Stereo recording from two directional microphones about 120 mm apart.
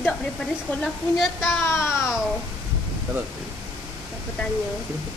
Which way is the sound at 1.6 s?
20° left (ahead or behind).